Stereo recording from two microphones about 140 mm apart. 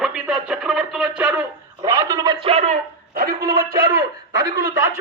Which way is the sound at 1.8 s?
25° right (ahead or behind).